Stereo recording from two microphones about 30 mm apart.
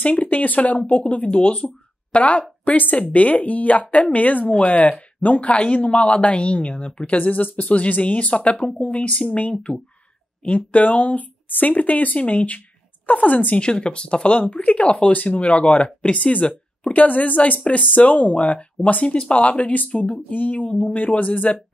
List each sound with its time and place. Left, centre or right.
0.0 s speech: left
1.0 s speech: left
2.6 s speech: left
5.5 s speech: left
8.5 s speech: left
10.4 s speech: left
13.6 s speech: left
14.4 s speech: left
14.9 s speech: left
16.8 s speech: left
20.1 s speech: left
21.5 s speech: left